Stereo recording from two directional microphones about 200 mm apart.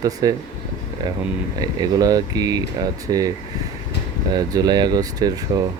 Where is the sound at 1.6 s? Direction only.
20° right (ahead or behind).